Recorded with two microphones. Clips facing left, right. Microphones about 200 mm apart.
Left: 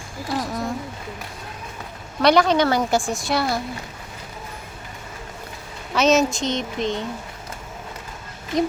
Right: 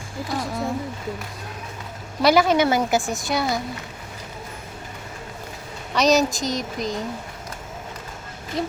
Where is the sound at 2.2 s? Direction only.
5° right (ahead or behind).